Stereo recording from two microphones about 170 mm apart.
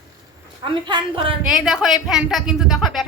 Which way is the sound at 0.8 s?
30° right (ahead or behind).